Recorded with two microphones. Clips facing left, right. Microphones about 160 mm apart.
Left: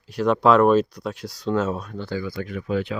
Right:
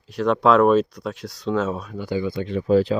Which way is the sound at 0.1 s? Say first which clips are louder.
Even; centre (ahead or behind).